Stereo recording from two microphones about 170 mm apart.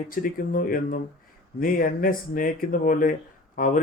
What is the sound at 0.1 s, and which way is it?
Speech, 55° left (ahead or behind).